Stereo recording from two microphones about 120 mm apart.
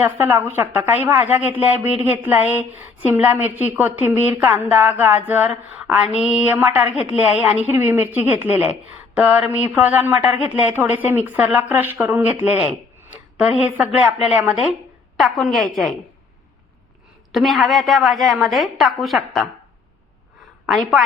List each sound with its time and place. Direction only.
0.0 s a woman's voice: 20° right (ahead or behind); by 16.0 s centre (ahead or behind)
17.3 s a woman's voice: centre (ahead or behind)
20.7 s a woman's voice: centre (ahead or behind)